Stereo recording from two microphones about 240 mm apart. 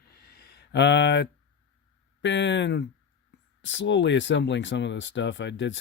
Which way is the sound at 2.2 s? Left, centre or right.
Left.